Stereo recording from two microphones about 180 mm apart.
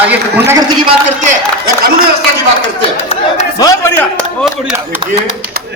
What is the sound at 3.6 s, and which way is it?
Speech, 15° left (ahead or behind).